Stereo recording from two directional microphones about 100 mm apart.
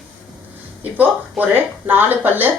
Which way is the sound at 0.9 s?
15° right (ahead or behind).